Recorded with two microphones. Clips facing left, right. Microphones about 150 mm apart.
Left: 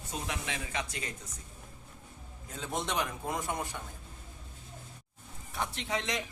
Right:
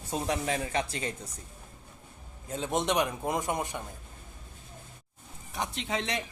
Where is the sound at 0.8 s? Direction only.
30° right (ahead or behind).